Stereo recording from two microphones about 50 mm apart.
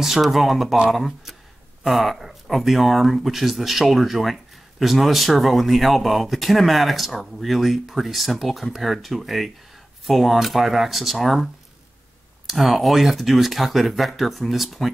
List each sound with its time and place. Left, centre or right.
0.0 s speech: centre